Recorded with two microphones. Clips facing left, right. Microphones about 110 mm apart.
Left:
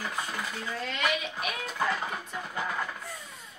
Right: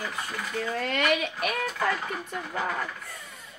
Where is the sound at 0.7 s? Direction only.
60° right (ahead or behind).